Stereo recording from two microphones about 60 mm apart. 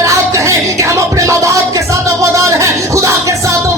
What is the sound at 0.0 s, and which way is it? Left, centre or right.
Music, right.